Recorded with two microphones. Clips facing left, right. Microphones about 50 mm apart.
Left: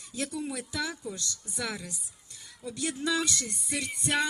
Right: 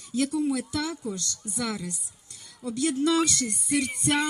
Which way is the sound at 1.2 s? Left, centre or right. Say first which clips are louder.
Right 4 dB; right.